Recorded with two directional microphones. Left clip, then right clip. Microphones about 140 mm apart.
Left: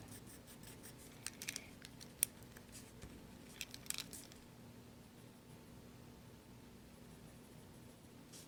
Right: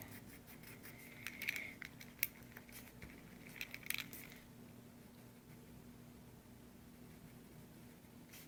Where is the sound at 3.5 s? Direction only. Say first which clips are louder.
Right 3 dB; 65° left (ahead or behind).